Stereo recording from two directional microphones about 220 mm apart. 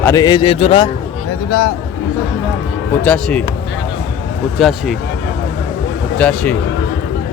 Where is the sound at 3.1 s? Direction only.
5° left (ahead or behind).